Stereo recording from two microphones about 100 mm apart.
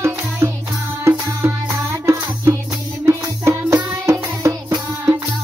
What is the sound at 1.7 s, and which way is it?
Music, 30° right (ahead or behind).